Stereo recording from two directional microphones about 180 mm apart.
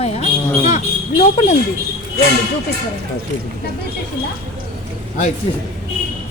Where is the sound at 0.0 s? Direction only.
40° left (ahead or behind).